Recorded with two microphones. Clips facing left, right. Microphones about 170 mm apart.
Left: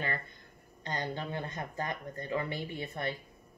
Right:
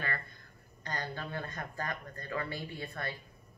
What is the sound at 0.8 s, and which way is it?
Speech, 20° left (ahead or behind).